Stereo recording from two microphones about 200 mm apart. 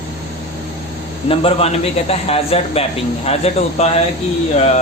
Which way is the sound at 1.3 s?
30° left (ahead or behind).